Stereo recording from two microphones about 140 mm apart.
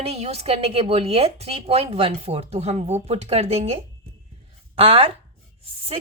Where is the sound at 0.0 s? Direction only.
45° right (ahead or behind).